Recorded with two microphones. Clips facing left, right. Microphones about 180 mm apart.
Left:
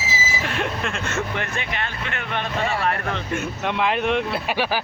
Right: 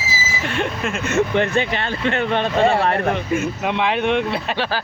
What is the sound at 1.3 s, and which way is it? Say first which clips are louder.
Speech: right 9 dB; 30° right (ahead or behind).